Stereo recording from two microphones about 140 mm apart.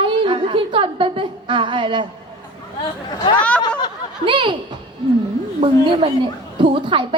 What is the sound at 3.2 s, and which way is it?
Speech, 35° left (ahead or behind).